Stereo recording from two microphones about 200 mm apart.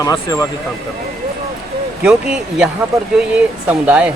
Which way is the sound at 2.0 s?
5° right (ahead or behind).